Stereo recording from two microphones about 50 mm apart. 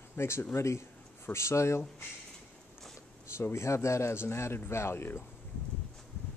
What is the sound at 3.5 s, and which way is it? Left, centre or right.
A man's voice, left.